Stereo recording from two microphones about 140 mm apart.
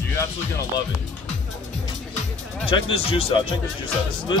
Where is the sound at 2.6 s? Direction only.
40° left (ahead or behind).